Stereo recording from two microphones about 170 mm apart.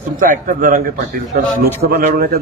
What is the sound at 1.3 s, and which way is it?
A man's voice, 60° right (ahead or behind).